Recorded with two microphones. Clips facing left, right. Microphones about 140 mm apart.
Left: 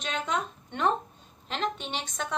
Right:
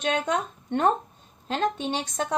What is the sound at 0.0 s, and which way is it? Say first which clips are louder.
Speech: right 5 dB; 50° right (ahead or behind).